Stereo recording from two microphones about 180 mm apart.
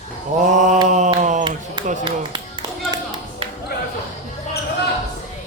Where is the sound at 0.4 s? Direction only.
45° right (ahead or behind).